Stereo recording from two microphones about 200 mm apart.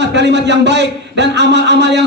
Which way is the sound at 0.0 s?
60° right (ahead or behind).